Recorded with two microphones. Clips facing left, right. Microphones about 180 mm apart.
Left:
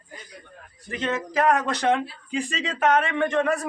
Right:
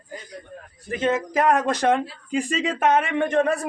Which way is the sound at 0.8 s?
45° right (ahead or behind).